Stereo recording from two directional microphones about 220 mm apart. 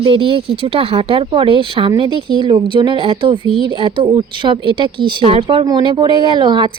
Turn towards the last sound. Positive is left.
turn(degrees=-20)  # may be behind; listen again after turning